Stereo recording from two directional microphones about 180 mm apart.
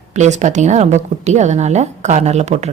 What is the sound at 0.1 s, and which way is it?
A woman's voice, 40° right (ahead or behind).